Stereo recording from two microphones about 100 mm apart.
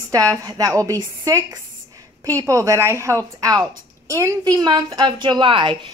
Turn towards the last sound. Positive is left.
turn(degrees=-60)  # may be behind; listen again after turning